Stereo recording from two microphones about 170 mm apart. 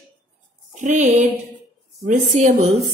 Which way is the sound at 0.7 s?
45° right (ahead or behind).